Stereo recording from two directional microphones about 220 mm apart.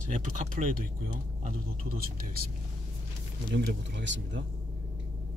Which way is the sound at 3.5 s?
55° right (ahead or behind).